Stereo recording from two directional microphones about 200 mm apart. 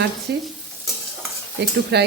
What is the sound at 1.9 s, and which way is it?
Speech, 55° right (ahead or behind).